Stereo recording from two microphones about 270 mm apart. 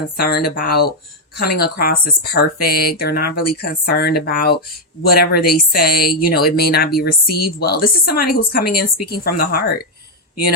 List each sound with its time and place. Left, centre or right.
0.2 s speech: left